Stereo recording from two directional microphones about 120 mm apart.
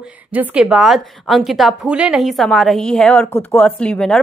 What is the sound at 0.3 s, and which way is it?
A woman's voice, 10° right (ahead or behind).